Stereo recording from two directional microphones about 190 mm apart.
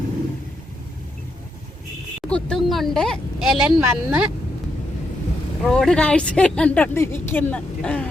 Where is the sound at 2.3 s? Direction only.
Centre (ahead or behind).